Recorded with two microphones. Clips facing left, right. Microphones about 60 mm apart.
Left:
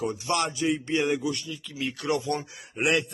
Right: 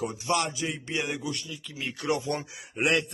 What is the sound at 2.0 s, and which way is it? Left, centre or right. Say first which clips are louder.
Speech: left 1 dB; right.